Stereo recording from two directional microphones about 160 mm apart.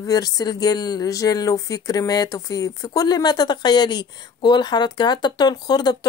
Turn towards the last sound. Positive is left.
turn(degrees=25)  # may be behind; listen again after turning